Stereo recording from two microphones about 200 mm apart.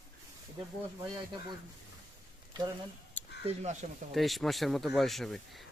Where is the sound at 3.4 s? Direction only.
35° right (ahead or behind).